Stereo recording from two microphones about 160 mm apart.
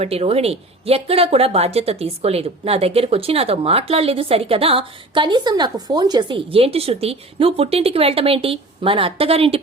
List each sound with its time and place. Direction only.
0.0 s speech: 40° right (ahead or behind)